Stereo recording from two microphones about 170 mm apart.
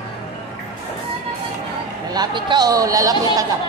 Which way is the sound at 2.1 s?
25° right (ahead or behind).